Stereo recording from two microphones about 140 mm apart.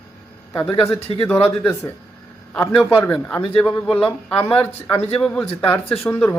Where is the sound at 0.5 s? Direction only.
35° left (ahead or behind).